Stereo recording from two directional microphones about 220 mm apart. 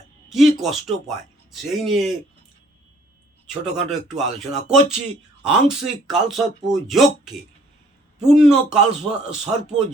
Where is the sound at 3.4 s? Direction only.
Centre (ahead or behind).